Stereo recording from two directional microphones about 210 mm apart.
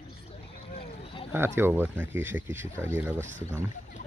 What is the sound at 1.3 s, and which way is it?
Speech, 10° right (ahead or behind).